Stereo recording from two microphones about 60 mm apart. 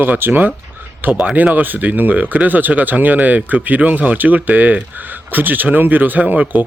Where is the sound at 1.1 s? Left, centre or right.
Centre.